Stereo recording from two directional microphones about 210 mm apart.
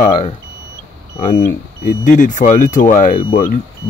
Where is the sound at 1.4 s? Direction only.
40° left (ahead or behind).